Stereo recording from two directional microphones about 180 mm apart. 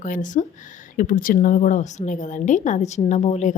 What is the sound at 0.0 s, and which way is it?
A woman's voice, 45° left (ahead or behind).